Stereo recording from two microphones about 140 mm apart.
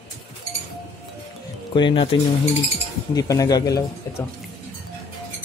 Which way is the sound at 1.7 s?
35° left (ahead or behind).